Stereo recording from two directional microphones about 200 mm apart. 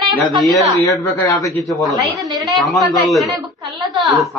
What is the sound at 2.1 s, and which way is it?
Speech, 20° right (ahead or behind).